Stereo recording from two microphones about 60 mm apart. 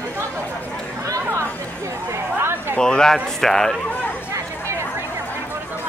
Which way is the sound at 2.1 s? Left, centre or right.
Right.